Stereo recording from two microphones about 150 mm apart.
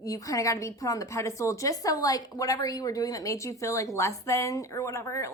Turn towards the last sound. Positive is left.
turn(degrees=20)  # may be behind; listen again after turning